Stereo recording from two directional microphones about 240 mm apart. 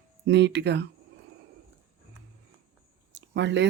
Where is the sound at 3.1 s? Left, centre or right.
Right.